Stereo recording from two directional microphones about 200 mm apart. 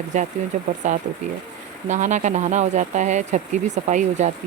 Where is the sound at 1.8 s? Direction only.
35° right (ahead or behind).